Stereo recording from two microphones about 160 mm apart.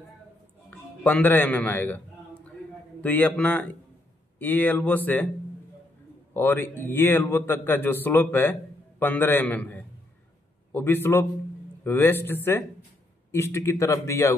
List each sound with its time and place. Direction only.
0.7 s speech: 10° left (ahead or behind)
3.0 s a man's voice: 10° left (ahead or behind)
6.3 s a man's voice: 15° left (ahead or behind)